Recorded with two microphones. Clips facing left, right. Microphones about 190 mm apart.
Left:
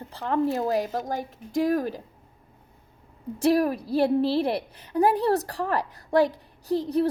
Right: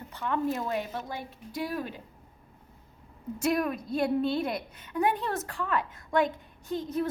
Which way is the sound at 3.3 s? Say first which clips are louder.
Left 6 dB; 30° left (ahead or behind).